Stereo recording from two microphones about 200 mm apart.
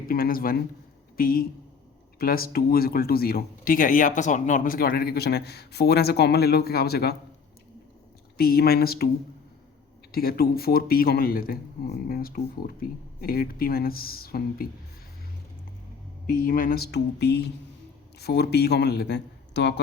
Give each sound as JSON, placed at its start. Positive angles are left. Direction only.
{"t": 0.1, "sound": "speech", "side_deg": 45}
{"t": 8.4, "sound": "speech", "side_deg": 50}
{"t": 10.1, "sound": "speech", "side_deg": 50}
{"t": 16.2, "sound": "a man's voice", "side_deg": 45}